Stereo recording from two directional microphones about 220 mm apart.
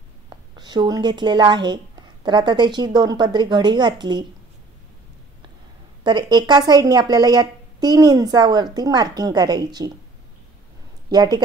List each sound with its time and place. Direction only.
0.3 s speech: 20° right (ahead or behind)
6.0 s a woman's voice: 20° right (ahead or behind)
11.1 s a woman's voice: 20° right (ahead or behind)